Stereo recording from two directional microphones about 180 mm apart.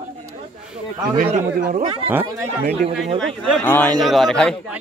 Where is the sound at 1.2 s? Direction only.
40° right (ahead or behind).